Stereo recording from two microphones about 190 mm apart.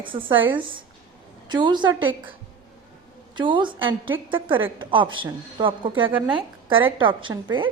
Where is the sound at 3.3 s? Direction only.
25° right (ahead or behind).